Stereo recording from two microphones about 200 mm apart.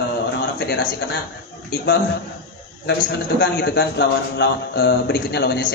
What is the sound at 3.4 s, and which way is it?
A man's voice, 55° left (ahead or behind).